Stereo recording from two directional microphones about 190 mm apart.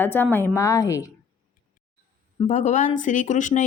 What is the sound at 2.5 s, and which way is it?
Speech, 40° left (ahead or behind).